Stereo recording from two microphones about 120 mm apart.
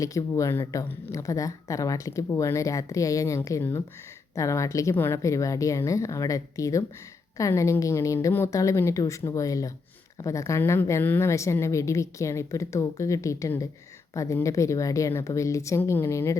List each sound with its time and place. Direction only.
0.0 s speech: 30° left (ahead or behind)